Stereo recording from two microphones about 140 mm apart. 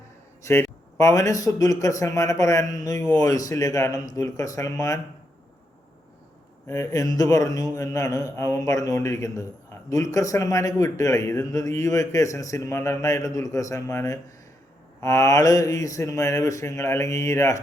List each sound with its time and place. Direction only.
0.4 s a man's voice: 20° left (ahead or behind)
6.7 s a man's voice: 25° left (ahead or behind)